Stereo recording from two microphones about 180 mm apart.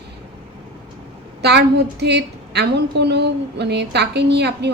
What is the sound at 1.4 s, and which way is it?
A woman's voice, 65° right (ahead or behind).